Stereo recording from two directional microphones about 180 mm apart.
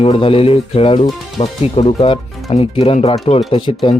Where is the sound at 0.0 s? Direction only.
30° left (ahead or behind).